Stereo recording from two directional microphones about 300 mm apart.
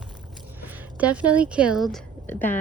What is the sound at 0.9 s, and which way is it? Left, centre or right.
Speech, centre.